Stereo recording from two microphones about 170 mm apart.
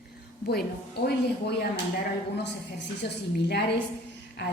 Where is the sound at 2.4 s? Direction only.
85° left.